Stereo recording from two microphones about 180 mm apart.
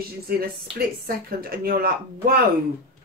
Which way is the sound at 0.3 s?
55° right (ahead or behind).